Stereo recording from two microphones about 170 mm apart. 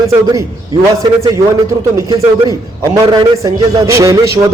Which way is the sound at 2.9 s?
20° right (ahead or behind).